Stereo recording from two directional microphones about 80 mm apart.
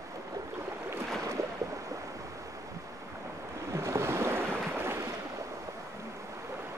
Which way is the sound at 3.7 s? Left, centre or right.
Right.